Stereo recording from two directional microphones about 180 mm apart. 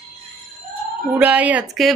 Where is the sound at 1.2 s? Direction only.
10° right (ahead or behind).